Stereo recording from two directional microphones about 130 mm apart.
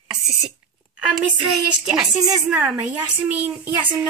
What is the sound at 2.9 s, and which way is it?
A child's voice, 10° right (ahead or behind).